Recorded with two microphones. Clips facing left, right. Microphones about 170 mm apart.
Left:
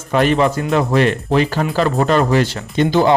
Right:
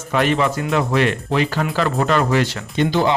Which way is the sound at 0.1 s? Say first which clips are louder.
Left 4 dB; 40° left (ahead or behind).